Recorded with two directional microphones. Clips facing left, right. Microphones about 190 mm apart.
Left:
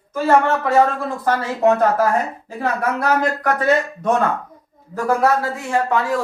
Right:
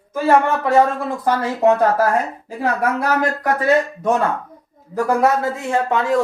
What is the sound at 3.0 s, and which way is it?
A man's voice, 10° right (ahead or behind).